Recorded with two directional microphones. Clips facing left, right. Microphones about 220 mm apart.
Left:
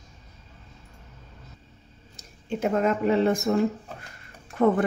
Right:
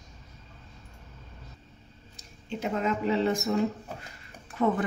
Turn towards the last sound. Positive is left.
turn(degrees=50)  # may be behind; listen again after turning